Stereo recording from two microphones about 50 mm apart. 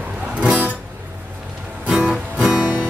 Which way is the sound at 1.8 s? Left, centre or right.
Right.